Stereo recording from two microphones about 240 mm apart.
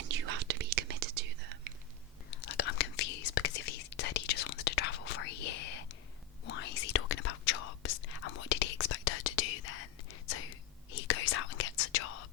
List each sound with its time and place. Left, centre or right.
0.1 s whispering: right
2.4 s whispering: left
11.1 s whispering: left